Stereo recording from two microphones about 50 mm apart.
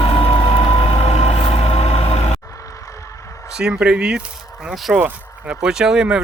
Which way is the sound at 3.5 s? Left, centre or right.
Centre.